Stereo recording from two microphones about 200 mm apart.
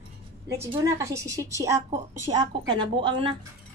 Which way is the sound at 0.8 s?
15° right (ahead or behind).